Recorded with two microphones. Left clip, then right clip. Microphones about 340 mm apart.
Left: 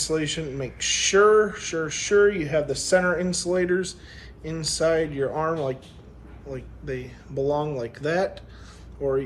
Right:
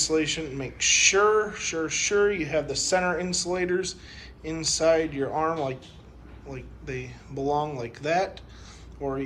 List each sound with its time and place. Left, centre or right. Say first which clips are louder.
0.3 s speech: left 1 dB; centre
2.1 s speech: left 5 dB; right
2.5 s speech: left 3 dB; centre